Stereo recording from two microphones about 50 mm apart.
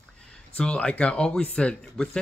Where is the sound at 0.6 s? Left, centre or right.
Centre.